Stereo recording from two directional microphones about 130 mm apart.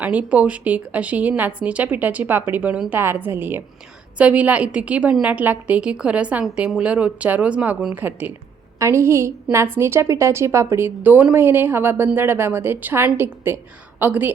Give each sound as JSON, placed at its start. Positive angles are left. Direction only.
{"t": 0.0, "sound": "a woman's voice", "side_deg": -10}
{"t": 8.8, "sound": "a woman's voice", "side_deg": -20}